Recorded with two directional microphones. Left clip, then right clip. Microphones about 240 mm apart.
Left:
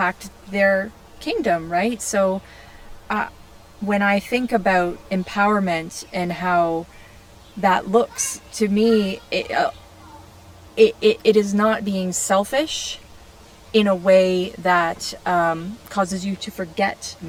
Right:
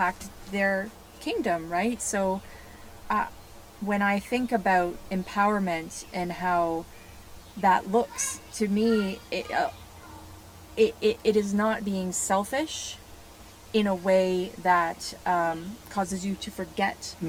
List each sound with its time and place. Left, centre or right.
0.0 s speech: left
10.8 s speech: left